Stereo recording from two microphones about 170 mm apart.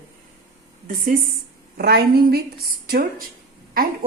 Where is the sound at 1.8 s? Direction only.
65° right (ahead or behind).